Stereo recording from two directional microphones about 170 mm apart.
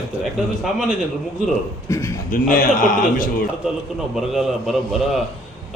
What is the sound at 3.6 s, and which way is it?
A man's voice, 5° right (ahead or behind).